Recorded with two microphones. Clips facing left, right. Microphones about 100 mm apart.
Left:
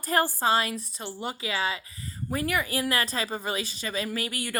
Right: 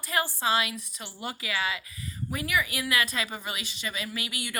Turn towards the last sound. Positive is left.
turn(degrees=40)  # may be behind; listen again after turning